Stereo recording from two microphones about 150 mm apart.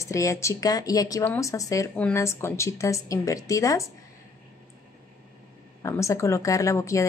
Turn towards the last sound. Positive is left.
turn(degrees=20)  # may be behind; listen again after turning